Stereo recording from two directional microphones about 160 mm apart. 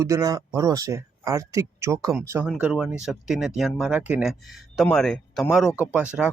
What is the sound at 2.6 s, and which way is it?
Speech, 5° right (ahead or behind).